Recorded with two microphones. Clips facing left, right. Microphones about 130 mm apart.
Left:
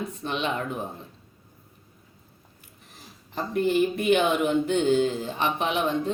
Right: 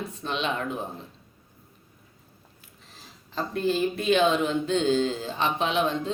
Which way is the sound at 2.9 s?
15° left (ahead or behind).